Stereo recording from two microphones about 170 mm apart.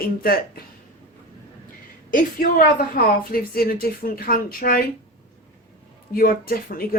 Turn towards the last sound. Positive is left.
turn(degrees=60)  # may be behind; listen again after turning